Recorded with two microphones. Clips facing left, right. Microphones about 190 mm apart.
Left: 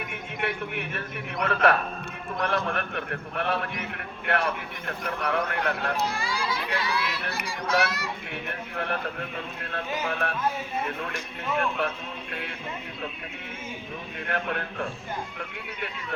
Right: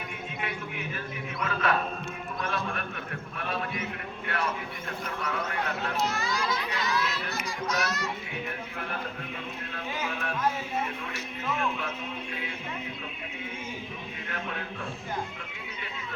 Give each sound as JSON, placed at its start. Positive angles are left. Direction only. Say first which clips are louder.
{"t": 0.4, "sound": "a sound", "louder": "left 7 dB", "side_deg": 65}
{"t": 2.4, "sound": "a man's voice", "louder": "left 6 dB", "side_deg": 65}
{"t": 6.1, "sound": "a child's voice", "louder": "even", "side_deg": 10}
{"t": 8.3, "sound": "a man's voice", "louder": "left 1 dB", "side_deg": 65}
{"t": 14.3, "sound": "a man's voice", "louder": "left 7 dB", "side_deg": 60}